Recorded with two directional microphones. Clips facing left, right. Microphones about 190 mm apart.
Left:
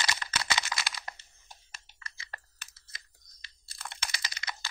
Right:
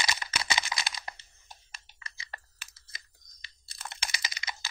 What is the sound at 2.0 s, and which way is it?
Computer keyboard, 20° right (ahead or behind).